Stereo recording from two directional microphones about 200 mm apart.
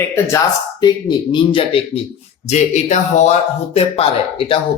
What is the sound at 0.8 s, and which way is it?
Speech, 20° left (ahead or behind).